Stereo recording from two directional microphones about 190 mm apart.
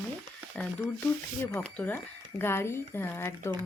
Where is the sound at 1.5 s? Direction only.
5° left (ahead or behind).